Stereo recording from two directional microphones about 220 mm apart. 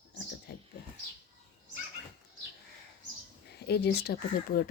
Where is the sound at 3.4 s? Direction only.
50° left (ahead or behind).